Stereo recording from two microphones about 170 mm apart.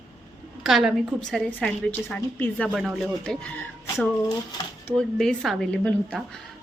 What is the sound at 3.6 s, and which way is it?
Speech, 10° left (ahead or behind).